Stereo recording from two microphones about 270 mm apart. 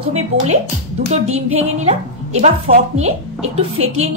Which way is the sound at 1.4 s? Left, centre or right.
Right.